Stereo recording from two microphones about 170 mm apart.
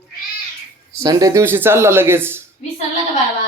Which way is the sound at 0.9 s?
20° right (ahead or behind).